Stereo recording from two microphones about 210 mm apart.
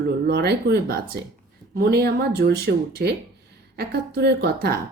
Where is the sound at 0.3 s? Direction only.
50° right (ahead or behind).